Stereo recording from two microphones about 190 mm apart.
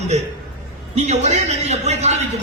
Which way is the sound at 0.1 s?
35° right (ahead or behind).